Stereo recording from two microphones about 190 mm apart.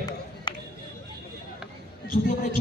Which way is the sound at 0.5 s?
20° left (ahead or behind).